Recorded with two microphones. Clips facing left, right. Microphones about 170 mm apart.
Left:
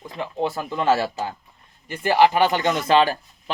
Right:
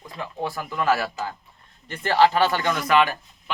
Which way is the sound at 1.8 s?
10° left (ahead or behind).